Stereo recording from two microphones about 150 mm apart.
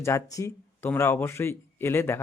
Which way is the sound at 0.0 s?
20° left (ahead or behind).